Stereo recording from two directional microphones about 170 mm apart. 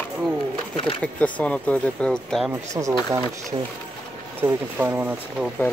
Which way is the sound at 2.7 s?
20° right (ahead or behind).